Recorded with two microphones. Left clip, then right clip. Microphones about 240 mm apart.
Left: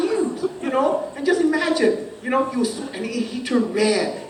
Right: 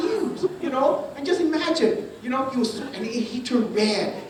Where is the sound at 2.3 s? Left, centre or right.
Right.